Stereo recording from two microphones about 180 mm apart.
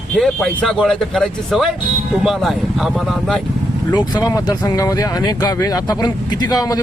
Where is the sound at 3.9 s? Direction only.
25° left (ahead or behind).